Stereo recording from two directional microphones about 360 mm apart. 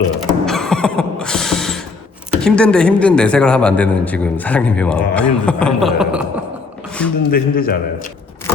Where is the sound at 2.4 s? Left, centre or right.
Centre.